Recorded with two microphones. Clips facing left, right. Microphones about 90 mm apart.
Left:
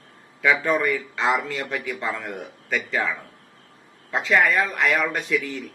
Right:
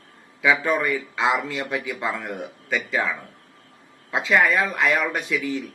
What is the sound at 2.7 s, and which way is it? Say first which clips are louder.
Speech: even; centre (ahead or behind).